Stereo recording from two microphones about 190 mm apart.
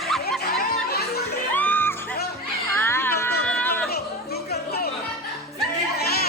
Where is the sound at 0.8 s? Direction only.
55° left (ahead or behind).